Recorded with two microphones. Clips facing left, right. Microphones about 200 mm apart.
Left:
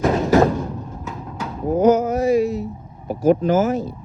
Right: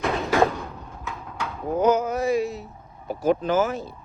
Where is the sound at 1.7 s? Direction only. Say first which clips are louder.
Left 5 dB; 45° left (ahead or behind).